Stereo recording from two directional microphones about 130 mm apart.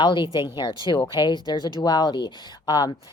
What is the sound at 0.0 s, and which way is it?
Speech, 35° left (ahead or behind).